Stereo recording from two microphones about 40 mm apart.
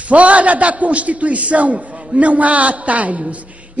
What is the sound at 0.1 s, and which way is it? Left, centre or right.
A man's voice, right.